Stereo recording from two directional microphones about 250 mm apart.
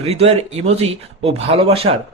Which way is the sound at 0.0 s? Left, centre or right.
Right.